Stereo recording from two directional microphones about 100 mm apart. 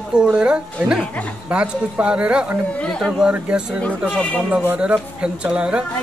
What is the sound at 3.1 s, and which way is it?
Speech, 10° right (ahead or behind).